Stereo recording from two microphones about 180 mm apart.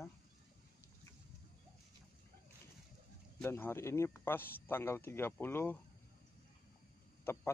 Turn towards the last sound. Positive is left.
turn(degrees=10)  # may be behind; listen again after turning